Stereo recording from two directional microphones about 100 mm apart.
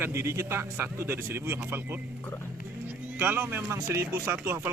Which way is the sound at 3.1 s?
20° right (ahead or behind).